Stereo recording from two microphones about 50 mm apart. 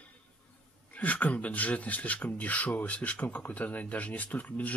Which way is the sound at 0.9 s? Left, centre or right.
Left.